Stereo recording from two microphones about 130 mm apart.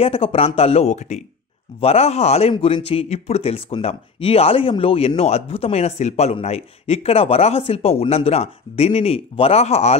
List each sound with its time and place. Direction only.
0.0 s speech: 45° left (ahead or behind)